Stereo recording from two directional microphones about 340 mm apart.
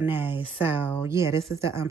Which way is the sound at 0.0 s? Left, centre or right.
Centre.